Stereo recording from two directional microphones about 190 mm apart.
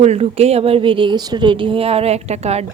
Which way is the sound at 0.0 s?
35° right (ahead or behind).